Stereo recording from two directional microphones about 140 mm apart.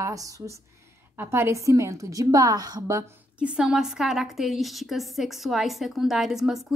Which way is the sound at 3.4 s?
5° right (ahead or behind).